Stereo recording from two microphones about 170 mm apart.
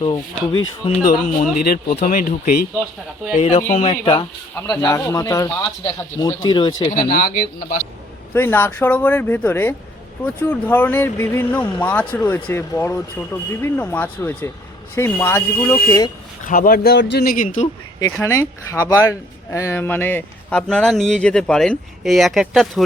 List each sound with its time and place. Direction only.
0.0 s speech: 35° left (ahead or behind)
1.0 s speech: 55° left (ahead or behind)
3.3 s speech: 40° left (ahead or behind)
7.1 s speech: 55° left (ahead or behind)
8.3 s speech: 10° left (ahead or behind)
16.4 s speech: 55° left (ahead or behind); by 17.3 s 75° left (ahead or behind)
17.3 s speech: 50° left (ahead or behind)
18.0 s speech: 15° left (ahead or behind); by 22.8 s centre (ahead or behind)